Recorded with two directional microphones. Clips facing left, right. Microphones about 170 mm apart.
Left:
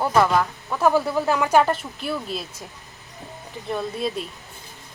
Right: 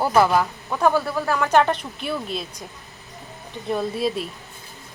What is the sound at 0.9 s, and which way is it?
Speech, 15° left (ahead or behind).